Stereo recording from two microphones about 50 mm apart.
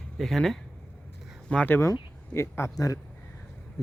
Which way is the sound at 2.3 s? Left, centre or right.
Left.